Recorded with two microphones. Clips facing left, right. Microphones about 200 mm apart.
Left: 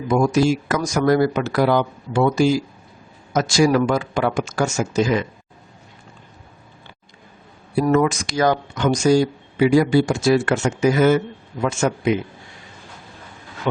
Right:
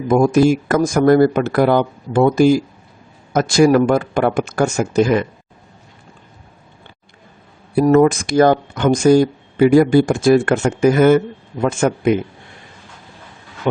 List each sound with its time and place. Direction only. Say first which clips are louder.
0.1 s speech: right 5 dB; 50° right (ahead or behind)
7.9 s speech: right 6 dB; 50° right (ahead or behind)